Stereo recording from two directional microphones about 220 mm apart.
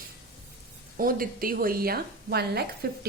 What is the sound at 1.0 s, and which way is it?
A woman's voice, 40° right (ahead or behind).